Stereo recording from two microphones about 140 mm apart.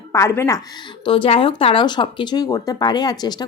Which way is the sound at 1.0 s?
40° left (ahead or behind).